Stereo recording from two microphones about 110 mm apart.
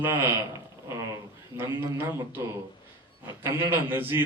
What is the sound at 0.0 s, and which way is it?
Speech, 20° right (ahead or behind).